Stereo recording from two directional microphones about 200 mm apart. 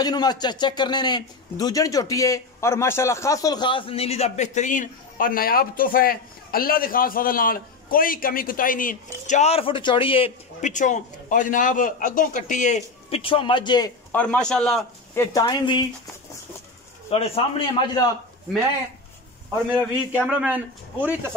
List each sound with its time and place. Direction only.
0.0 s a man's voice: 20° left (ahead or behind); by 12.8 s 35° left (ahead or behind)
13.1 s a man's voice: 25° left (ahead or behind)
14.1 s a man's voice: 5° left (ahead or behind)
15.1 s a man's voice: 20° left (ahead or behind)
17.1 s a man's voice: 30° left (ahead or behind)
19.7 s a man's voice: 10° right (ahead or behind)